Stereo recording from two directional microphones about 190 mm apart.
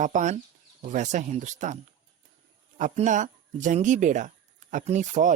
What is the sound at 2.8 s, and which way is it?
Speech, 40° right (ahead or behind).